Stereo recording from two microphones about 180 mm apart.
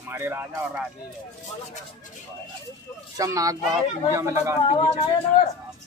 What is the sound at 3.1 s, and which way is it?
Speech, 20° right (ahead or behind).